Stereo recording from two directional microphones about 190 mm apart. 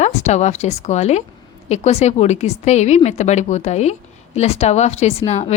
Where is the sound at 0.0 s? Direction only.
35° left (ahead or behind).